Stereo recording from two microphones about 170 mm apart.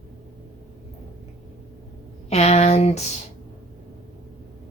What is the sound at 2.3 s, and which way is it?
Speech, 40° left (ahead or behind).